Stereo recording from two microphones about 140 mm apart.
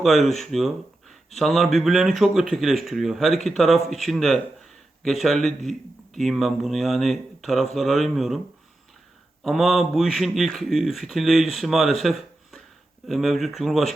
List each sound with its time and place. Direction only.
0.0 s speech: centre (ahead or behind)
9.4 s speech: centre (ahead or behind)